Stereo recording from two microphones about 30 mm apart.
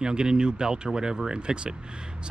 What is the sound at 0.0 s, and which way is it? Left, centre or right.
Speech, right.